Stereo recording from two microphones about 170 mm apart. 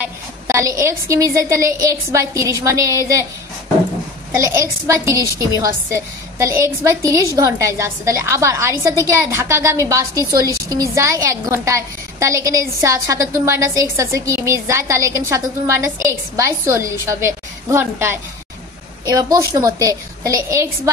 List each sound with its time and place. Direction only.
0.0 s a woman's voice: 15° right (ahead or behind)
4.4 s a woman's voice: 15° right (ahead or behind)